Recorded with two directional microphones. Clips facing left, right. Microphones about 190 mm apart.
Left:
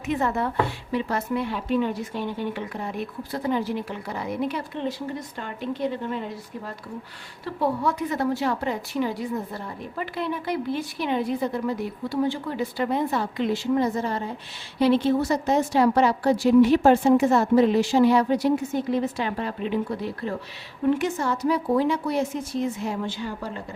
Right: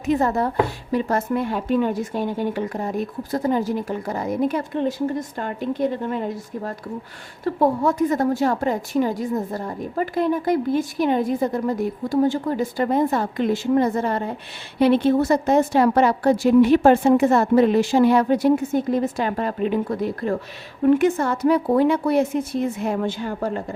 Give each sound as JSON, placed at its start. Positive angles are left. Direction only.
{"t": 0.0, "sound": "a woman's voice", "side_deg": -40}